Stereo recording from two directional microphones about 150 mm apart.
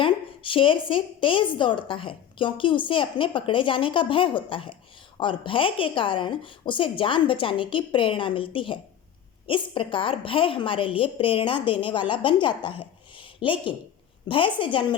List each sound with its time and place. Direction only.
0.0 s a woman's voice: 35° left (ahead or behind)